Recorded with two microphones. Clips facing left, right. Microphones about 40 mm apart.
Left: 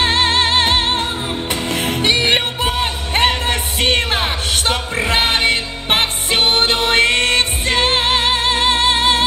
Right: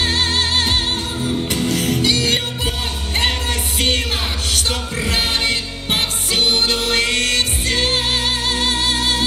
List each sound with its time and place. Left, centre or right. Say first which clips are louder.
0.0 s music: left 4 dB; left